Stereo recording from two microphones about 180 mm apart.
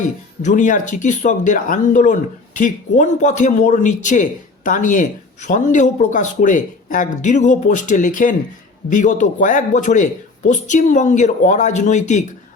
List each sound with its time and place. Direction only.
0.0 s a man's voice: 45° left (ahead or behind)